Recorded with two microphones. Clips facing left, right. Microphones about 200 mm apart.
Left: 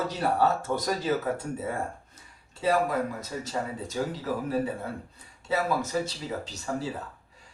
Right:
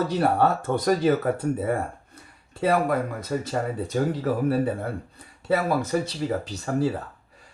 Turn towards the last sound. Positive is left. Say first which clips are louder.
# right 6 dB
turn(degrees=-55)  # may be behind; listen again after turning